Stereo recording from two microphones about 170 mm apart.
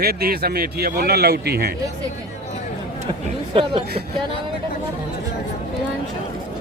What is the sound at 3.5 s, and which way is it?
Speech, 30° right (ahead or behind).